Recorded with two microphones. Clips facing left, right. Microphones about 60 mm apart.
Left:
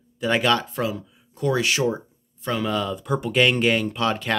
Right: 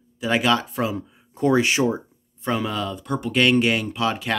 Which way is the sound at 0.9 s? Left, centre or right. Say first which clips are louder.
Right 1 dB; right.